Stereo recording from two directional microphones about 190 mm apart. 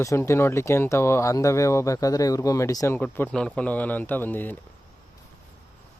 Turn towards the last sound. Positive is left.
turn(degrees=10)  # may be behind; listen again after turning